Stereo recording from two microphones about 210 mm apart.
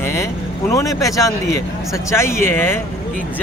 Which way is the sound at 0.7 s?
15° left (ahead or behind).